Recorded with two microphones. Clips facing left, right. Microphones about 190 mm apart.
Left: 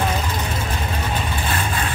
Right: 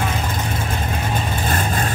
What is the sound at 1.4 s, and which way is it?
Vehicle, 45° right (ahead or behind).